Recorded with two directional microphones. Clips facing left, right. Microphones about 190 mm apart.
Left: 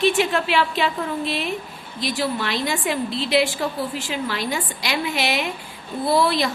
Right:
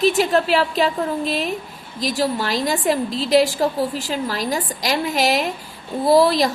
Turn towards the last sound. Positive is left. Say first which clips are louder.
# right 5 dB
turn(degrees=-40)  # may be behind; listen again after turning